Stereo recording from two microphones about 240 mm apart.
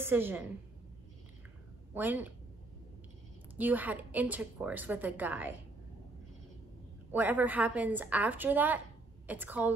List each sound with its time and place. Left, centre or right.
0.0 s a woman's voice: centre
2.0 s a woman's voice: centre
3.5 s a woman's voice: centre
7.1 s a woman's voice: centre